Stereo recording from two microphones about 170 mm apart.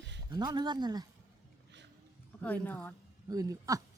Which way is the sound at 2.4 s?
10° left (ahead or behind).